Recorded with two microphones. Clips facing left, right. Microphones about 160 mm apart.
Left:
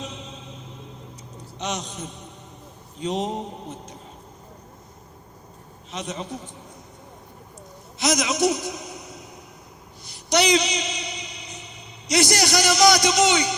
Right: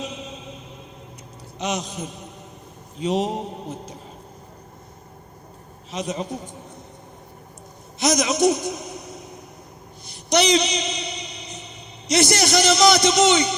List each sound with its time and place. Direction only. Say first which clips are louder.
0.0 s music: right 3 dB; 10° right (ahead or behind)
1.5 s a man's voice: right 3 dB; 10° right (ahead or behind)
7.9 s a man's voice: right 3 dB; 20° right (ahead or behind)
10.1 s a sound: right 1 dB; 20° right (ahead or behind)
11.4 s a sound: right 2 dB; 20° left (ahead or behind)
12.0 s a man's voice: right 2 dB; 20° right (ahead or behind)